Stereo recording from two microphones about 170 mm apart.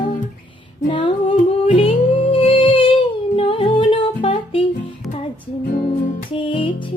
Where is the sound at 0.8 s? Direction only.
30° left (ahead or behind).